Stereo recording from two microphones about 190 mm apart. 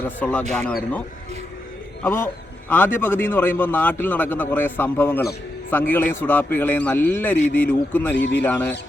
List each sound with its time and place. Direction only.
0.0 s a man's voice: 10° left (ahead or behind)
2.0 s a man's voice: 10° left (ahead or behind)
8.1 s speech: 70° left (ahead or behind)
8.4 s a man's voice: 10° left (ahead or behind)